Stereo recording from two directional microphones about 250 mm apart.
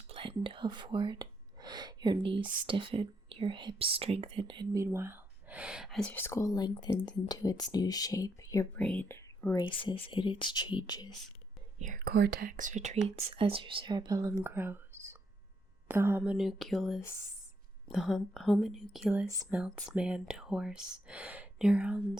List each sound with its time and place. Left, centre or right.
0.1 s whispering: right
2.6 s speech: right; by 11.1 s centre
11.8 s speech: right; by 22.2 s centre